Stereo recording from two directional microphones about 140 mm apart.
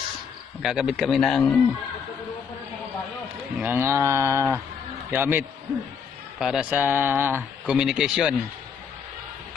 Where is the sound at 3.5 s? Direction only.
15° right (ahead or behind).